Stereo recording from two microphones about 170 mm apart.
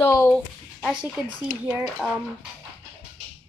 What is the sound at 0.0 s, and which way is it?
Speech, 15° left (ahead or behind).